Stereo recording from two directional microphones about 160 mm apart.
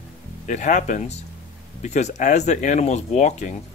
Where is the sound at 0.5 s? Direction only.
50° left (ahead or behind).